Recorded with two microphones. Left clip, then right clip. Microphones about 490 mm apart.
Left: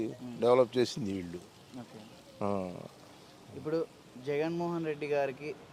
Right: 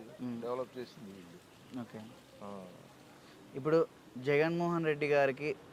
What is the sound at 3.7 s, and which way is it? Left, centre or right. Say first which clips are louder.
Speech: right 4 dB; centre.